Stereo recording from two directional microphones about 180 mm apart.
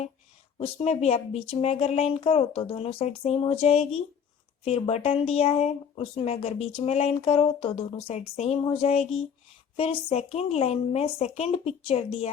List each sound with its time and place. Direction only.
0.6 s speech: 35° left (ahead or behind)